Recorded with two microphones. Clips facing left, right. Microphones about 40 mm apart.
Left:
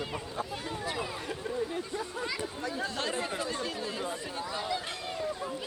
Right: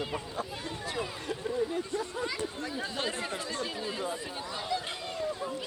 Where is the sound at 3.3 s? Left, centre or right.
Centre.